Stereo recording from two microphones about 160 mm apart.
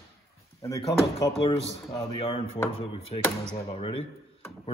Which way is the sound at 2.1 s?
35° left (ahead or behind).